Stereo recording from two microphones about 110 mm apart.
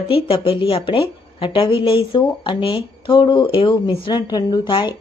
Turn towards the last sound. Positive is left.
turn(degrees=45)  # may be behind; listen again after turning